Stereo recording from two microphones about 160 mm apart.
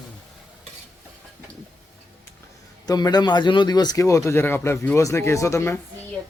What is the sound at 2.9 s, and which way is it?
Speech, 25° left (ahead or behind).